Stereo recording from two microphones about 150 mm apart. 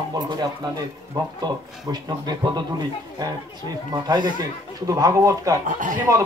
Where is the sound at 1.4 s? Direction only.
25° right (ahead or behind).